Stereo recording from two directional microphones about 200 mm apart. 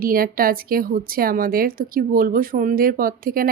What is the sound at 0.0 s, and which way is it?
A woman's voice, 45° right (ahead or behind).